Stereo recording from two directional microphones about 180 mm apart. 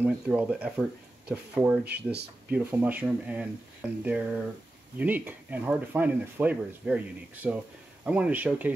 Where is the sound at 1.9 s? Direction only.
65° right (ahead or behind).